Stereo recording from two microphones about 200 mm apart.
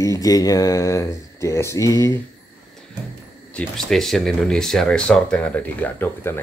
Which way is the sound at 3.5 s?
Centre (ahead or behind).